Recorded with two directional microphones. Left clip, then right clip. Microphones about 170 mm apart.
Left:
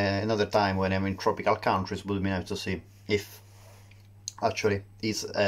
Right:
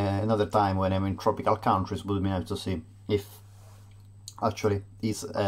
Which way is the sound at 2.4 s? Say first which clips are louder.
Even; 25° left (ahead or behind).